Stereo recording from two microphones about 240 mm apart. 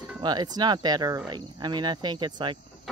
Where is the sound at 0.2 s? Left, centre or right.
Centre.